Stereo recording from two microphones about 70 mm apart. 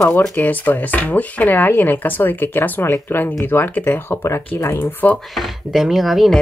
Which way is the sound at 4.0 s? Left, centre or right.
Left.